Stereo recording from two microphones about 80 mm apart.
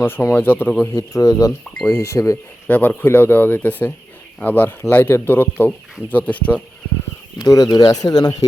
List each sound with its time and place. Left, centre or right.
0.0 s speech: left
0.9 s speech: left
2.6 s speech: left
7.3 s speech: left